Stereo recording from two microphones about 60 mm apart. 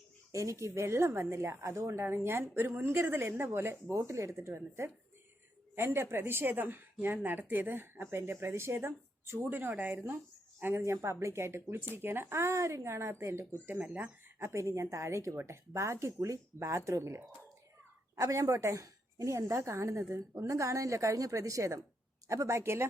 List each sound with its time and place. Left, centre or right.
0.3 s speech: right
10.6 s speech: right
13.7 s speech: right
14.3 s a woman's voice: right
18.2 s a woman's voice: right